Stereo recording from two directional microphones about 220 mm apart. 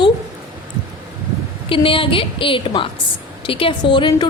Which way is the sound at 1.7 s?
25° left (ahead or behind).